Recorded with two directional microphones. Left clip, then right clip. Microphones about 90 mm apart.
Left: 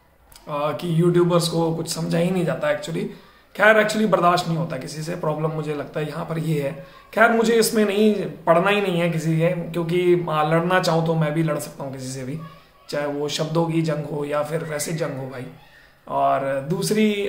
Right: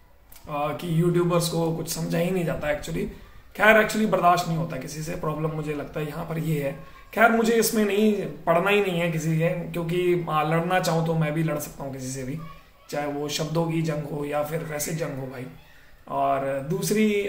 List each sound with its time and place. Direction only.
0.5 s a man's voice: 15° left (ahead or behind)